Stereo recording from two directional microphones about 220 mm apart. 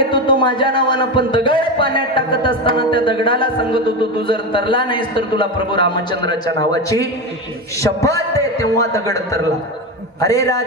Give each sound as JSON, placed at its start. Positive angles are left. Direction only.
{"t": 0.1, "sound": "a man's voice", "side_deg": 20}